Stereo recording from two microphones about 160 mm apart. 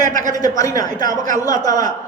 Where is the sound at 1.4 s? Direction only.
20° left (ahead or behind).